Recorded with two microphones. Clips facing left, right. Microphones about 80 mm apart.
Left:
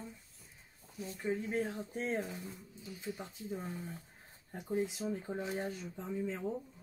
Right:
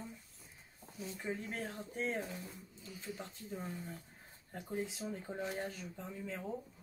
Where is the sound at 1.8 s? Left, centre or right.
Left.